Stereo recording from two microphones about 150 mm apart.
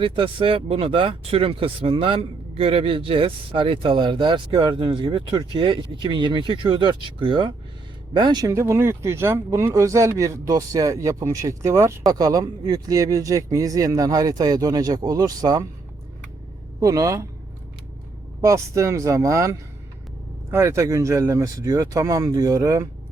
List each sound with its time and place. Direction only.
0.0 s speech: 35° right (ahead or behind)
16.8 s speech: 20° right (ahead or behind)
18.4 s speech: 20° right (ahead or behind)